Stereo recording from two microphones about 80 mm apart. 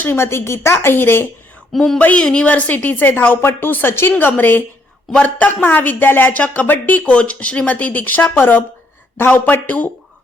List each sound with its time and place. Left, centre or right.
0.0 s a woman's voice: left